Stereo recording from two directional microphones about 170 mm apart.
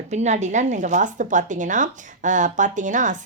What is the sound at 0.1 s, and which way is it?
Speech, 40° right (ahead or behind).